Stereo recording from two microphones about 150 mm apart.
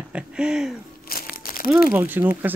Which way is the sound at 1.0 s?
75° left (ahead or behind).